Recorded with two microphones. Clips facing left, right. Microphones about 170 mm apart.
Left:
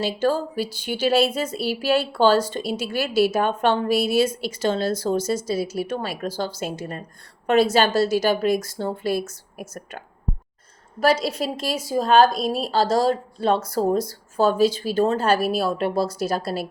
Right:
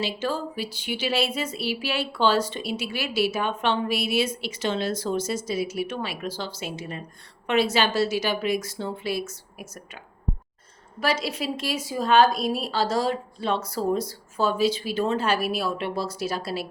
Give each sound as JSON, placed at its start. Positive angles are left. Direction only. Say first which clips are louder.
{"t": 0.0, "sound": "speech", "louder": "left 6 dB", "side_deg": 45}
{"t": 11.0, "sound": "a woman's voice", "louder": "left 6 dB", "side_deg": 40}